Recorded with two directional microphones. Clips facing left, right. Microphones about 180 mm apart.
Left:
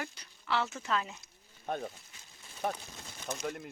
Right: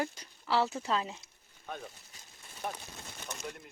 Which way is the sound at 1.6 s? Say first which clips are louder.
Left 6 dB; 45° left (ahead or behind).